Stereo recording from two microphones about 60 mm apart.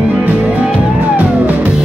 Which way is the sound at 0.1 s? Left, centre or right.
Right.